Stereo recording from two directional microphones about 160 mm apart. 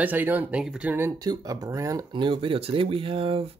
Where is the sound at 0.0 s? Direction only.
10° right (ahead or behind).